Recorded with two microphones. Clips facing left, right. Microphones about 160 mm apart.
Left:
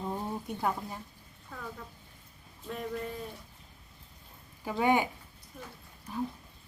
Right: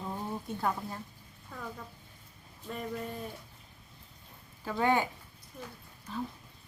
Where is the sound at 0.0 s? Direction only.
15° left (ahead or behind).